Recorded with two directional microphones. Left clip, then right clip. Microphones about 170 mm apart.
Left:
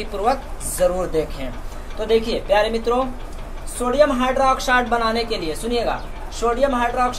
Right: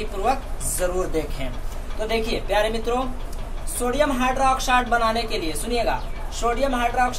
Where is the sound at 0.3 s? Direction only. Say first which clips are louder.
Left 2 dB; 40° left (ahead or behind).